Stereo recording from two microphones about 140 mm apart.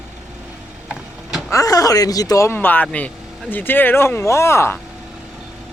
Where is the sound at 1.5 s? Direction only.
25° left (ahead or behind).